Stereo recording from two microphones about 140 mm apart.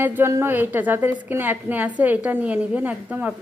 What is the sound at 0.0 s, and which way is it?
A woman's voice, 15° right (ahead or behind).